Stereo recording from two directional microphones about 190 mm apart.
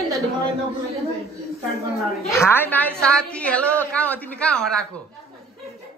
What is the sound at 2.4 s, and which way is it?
A woman's voice, 10° left (ahead or behind).